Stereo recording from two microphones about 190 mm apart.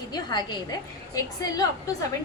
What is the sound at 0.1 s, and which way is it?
Speech, 20° left (ahead or behind).